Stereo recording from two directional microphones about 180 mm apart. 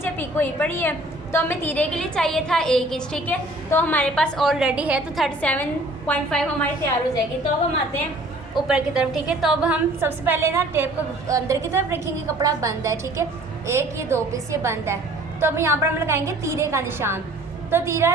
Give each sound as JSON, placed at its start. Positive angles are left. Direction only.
{"t": 0.0, "sound": "a woman's voice", "side_deg": 10}
{"t": 8.6, "sound": "a woman's voice", "side_deg": -5}